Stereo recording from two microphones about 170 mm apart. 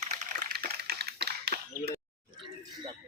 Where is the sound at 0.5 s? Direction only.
65° right (ahead or behind).